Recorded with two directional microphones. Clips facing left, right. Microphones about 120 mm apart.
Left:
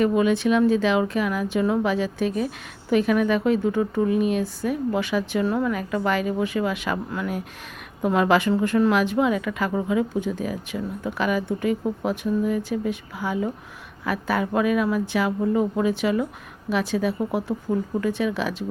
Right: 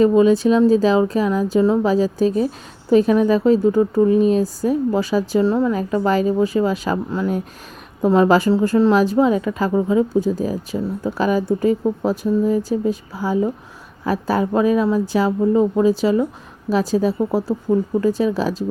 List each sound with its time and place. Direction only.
0.0 s a woman's voice: 30° right (ahead or behind)